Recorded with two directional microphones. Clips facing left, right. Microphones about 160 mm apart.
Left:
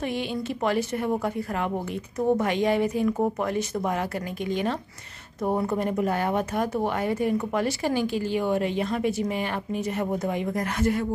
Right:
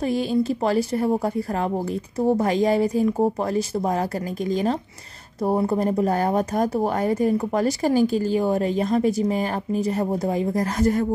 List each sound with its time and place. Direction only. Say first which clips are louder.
0.0 s speech: right 7 dB; 35° right (ahead or behind)